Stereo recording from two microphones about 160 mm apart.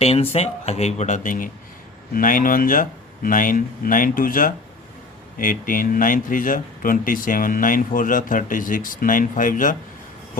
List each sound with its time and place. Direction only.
0.0 s speech: 40° left (ahead or behind); by 9.7 s 55° left (ahead or behind)